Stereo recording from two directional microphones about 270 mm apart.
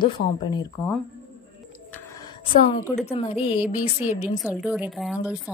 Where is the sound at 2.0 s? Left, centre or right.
Centre.